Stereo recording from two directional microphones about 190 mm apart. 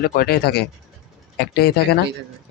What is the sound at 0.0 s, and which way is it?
Speech, 50° left (ahead or behind).